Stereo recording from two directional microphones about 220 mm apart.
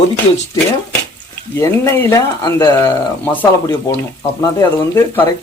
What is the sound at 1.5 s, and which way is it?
Speech, 10° left (ahead or behind).